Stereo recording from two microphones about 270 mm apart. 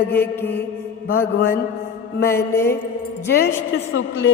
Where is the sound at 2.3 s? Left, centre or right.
Centre.